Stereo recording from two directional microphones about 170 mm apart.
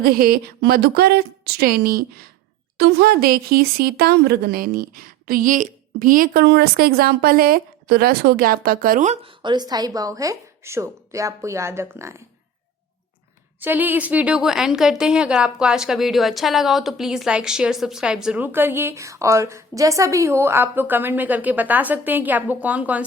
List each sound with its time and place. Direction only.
0.0 s speech: 60° right (ahead or behind)
9.2 s a woman's voice: 25° right (ahead or behind)
13.6 s a woman's voice: 10° right (ahead or behind)